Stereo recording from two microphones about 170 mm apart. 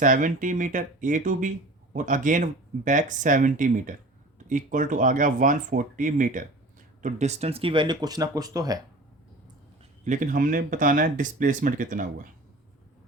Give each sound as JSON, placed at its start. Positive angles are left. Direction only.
{"t": 0.0, "sound": "speech", "side_deg": -50}
{"t": 10.0, "sound": "speech", "side_deg": -50}